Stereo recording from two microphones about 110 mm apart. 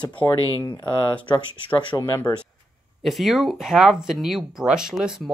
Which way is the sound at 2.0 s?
35° left (ahead or behind).